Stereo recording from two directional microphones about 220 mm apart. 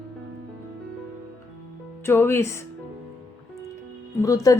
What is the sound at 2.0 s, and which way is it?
Speech, 10° left (ahead or behind).